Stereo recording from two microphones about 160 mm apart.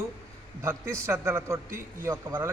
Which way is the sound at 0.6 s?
15° right (ahead or behind).